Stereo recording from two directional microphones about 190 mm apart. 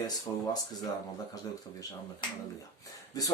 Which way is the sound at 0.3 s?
15° left (ahead or behind).